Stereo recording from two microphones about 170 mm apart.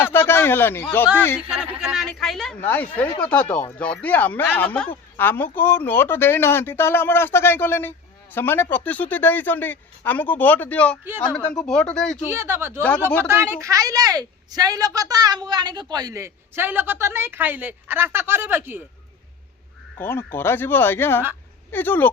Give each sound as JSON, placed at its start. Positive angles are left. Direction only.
{"t": 0.0, "sound": "speech", "side_deg": 15}
{"t": 1.5, "sound": "speech", "side_deg": -5}
{"t": 11.0, "sound": "a woman's voice", "side_deg": -10}
{"t": 11.3, "sound": "speech", "side_deg": 5}
{"t": 12.3, "sound": "a woman's voice", "side_deg": -15}
{"t": 20.0, "sound": "speech", "side_deg": 15}